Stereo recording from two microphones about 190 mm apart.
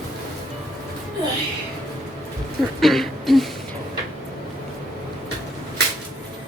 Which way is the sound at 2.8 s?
Centre (ahead or behind).